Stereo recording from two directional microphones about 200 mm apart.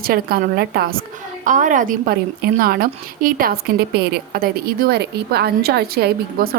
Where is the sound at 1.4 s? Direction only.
40° right (ahead or behind).